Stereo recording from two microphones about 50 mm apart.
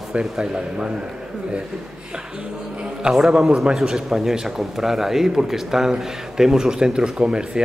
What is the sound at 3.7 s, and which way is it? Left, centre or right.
A man's voice, centre.